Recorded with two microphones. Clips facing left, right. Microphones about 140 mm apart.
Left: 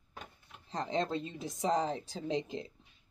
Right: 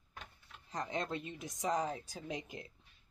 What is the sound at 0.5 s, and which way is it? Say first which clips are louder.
Speech: left 4 dB; 30° left (ahead or behind).